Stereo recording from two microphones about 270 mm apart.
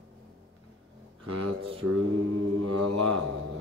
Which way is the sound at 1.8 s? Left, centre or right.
Right.